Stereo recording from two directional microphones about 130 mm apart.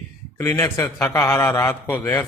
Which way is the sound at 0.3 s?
20° left (ahead or behind).